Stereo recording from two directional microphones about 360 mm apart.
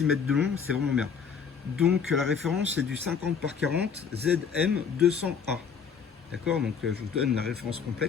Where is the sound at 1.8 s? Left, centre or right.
Centre.